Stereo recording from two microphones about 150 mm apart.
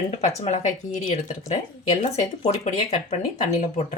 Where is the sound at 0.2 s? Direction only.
50° left (ahead or behind).